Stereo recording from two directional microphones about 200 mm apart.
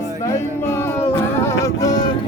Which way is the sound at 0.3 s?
15° left (ahead or behind).